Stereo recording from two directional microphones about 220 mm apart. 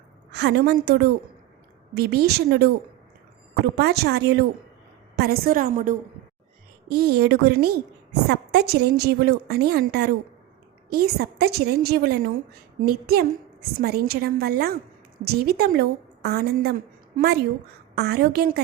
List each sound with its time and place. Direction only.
0.3 s a woman's voice: 50° right (ahead or behind)